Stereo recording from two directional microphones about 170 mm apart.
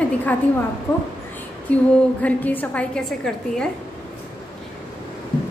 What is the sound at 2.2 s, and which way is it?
A woman's voice, 10° left (ahead or behind).